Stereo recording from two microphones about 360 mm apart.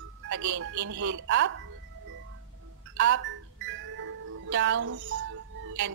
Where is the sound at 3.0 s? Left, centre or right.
Right.